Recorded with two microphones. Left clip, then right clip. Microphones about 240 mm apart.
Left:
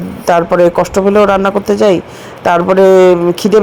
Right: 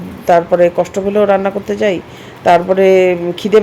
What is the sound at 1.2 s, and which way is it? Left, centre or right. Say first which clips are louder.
A man's voice: left 3 dB; centre.